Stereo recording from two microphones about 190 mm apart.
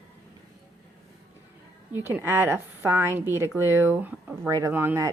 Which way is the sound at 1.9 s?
10° right (ahead or behind).